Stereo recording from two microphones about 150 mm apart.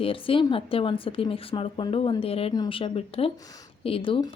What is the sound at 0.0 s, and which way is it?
A woman's voice, 35° left (ahead or behind).